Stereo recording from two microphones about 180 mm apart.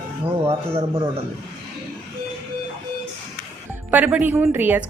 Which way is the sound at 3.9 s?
10° right (ahead or behind).